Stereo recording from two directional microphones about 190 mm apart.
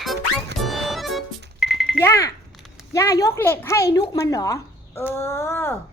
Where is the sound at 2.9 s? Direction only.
15° left (ahead or behind).